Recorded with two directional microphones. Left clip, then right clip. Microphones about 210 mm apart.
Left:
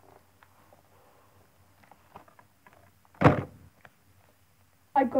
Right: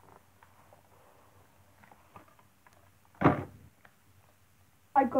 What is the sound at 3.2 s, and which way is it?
Door, 45° left (ahead or behind).